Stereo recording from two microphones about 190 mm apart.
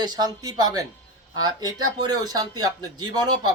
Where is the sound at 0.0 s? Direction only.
20° right (ahead or behind).